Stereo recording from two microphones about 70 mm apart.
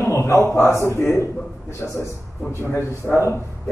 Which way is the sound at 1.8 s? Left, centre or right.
Centre.